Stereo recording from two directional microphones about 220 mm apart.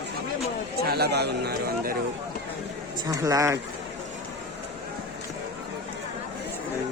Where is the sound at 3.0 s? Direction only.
15° right (ahead or behind).